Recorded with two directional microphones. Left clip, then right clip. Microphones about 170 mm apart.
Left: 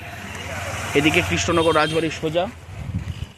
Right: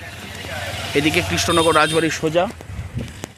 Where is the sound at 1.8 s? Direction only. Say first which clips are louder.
Right 4 dB; 25° right (ahead or behind).